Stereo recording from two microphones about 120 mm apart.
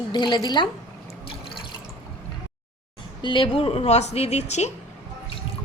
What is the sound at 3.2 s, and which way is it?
Speech, 45° left (ahead or behind).